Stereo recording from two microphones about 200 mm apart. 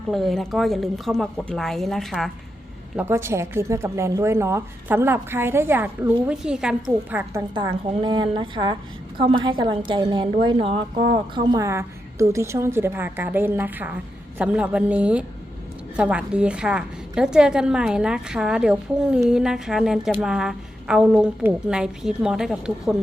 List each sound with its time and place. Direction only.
0.1 s a woman's voice: centre (ahead or behind)
2.9 s a woman's voice: 10° right (ahead or behind)
7.5 s a woman's voice: 25° right (ahead or behind); by 23.0 s 5° right (ahead or behind)